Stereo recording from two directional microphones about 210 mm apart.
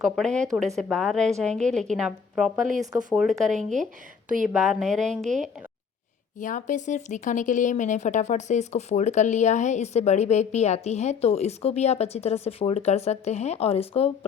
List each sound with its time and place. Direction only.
0.0 s a woman's voice: centre (ahead or behind)
6.4 s speech: 35° left (ahead or behind)